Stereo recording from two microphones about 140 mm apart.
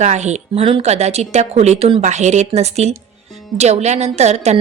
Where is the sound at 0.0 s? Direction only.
55° right (ahead or behind).